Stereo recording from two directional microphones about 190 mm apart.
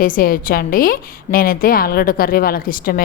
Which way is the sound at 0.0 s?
50° left (ahead or behind).